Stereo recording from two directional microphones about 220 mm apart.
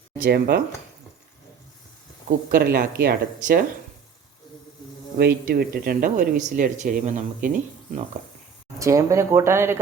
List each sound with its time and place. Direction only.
0.2 s speech: 45° right (ahead or behind)
2.5 s speech: 40° right (ahead or behind)
5.1 s speech: 45° right (ahead or behind)
8.8 s speech: 15° right (ahead or behind)